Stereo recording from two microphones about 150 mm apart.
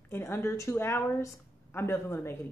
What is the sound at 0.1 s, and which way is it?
A woman's voice, 15° left (ahead or behind).